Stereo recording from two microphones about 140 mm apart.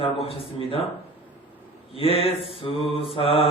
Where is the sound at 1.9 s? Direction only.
40° left (ahead or behind).